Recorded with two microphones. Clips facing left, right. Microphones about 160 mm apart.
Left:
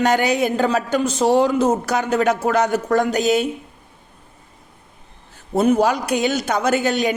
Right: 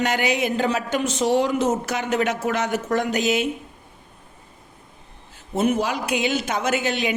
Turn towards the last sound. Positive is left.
turn(degrees=40)  # may be behind; listen again after turning